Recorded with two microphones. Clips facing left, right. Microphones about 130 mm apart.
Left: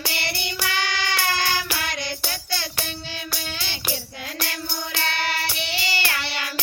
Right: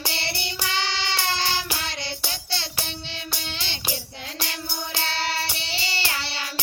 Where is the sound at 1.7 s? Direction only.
20° right (ahead or behind).